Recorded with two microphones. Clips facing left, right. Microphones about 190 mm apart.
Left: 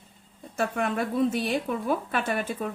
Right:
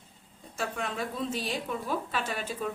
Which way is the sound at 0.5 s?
55° left (ahead or behind).